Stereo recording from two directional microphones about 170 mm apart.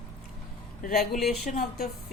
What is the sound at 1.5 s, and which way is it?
Speech, 65° left (ahead or behind).